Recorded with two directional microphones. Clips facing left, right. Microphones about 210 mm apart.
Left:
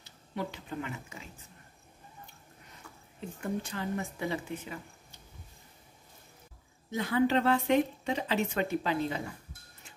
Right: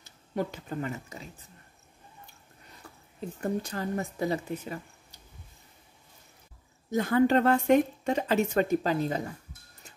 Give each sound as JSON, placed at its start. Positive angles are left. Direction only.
{"t": 0.0, "sound": "speech", "side_deg": -45}
{"t": 2.8, "sound": "a sound", "side_deg": -35}
{"t": 3.3, "sound": "speech", "side_deg": -40}
{"t": 6.9, "sound": "speech", "side_deg": -45}